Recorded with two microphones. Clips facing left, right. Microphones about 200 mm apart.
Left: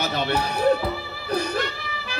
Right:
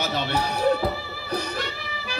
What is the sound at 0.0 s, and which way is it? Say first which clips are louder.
Music: left 1 dB; 55° left (ahead or behind).